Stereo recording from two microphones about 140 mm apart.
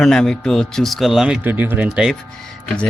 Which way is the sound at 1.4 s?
15° right (ahead or behind).